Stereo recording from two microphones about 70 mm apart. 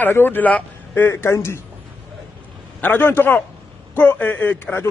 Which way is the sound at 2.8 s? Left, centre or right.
Left.